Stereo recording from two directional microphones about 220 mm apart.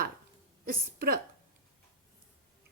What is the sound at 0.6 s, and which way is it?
Speech, 40° right (ahead or behind).